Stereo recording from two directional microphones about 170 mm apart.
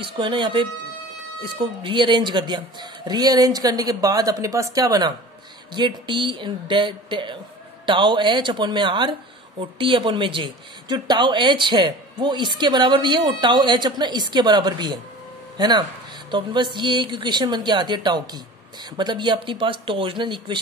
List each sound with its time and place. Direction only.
0.0 s a woman's voice: 30° right (ahead or behind)